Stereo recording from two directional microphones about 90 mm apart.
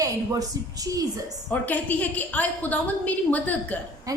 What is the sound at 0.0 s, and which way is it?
A woman's voice, 40° right (ahead or behind).